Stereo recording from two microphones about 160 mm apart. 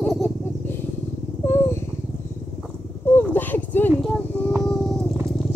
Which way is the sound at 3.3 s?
10° left (ahead or behind).